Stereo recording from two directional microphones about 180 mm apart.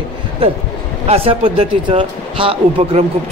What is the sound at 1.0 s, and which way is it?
Speech, 30° right (ahead or behind).